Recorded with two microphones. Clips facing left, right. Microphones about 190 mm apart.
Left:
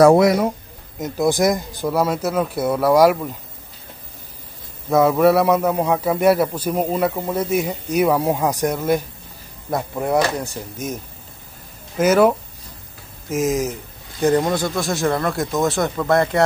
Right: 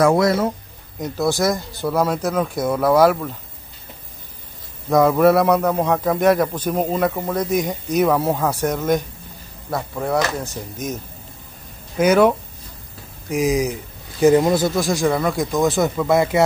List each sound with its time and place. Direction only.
0.2 s speech: 15° left (ahead or behind)
1.2 s a man's voice: 15° left (ahead or behind)
4.8 s a man's voice: centre (ahead or behind)
9.7 s a man's voice: 20° left (ahead or behind)
12.0 s speech: 5° left (ahead or behind)